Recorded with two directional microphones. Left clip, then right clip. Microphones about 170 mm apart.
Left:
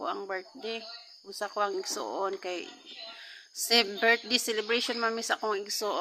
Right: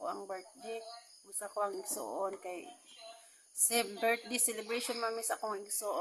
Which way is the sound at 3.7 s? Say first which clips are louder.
Left 8 dB; 20° left (ahead or behind).